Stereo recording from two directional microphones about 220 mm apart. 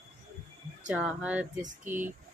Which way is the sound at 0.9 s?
5° right (ahead or behind).